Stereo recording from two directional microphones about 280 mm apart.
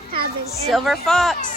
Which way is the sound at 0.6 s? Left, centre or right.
Centre.